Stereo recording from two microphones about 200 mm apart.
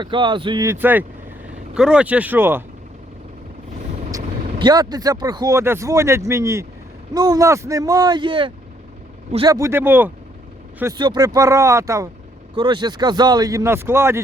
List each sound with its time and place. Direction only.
0.0 s speech: 25° right (ahead or behind)
4.1 s speech: 20° right (ahead or behind)
9.6 s speech: 10° right (ahead or behind)
10.9 s speech: 20° right (ahead or behind)